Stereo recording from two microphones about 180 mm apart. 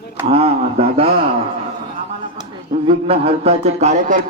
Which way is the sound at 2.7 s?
30° right (ahead or behind).